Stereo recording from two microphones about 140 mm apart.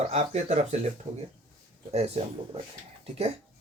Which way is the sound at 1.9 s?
50° right (ahead or behind).